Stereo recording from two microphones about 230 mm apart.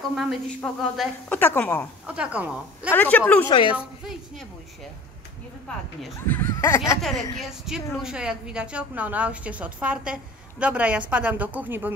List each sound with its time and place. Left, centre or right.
0.1 s a woman's voice: centre
2.0 s a woman's voice: centre
2.9 s a woman's voice: centre
3.4 s a woman's voice: left
6.2 s a woman's voice: centre
7.6 s a woman's voice: centre